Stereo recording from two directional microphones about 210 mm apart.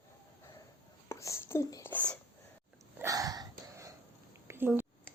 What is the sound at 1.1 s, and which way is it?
Speech, 15° left (ahead or behind).